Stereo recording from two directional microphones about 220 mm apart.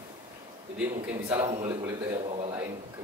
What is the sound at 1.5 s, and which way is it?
Speech, 15° right (ahead or behind).